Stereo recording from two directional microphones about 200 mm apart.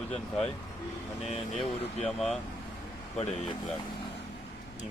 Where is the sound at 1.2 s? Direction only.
30° left (ahead or behind).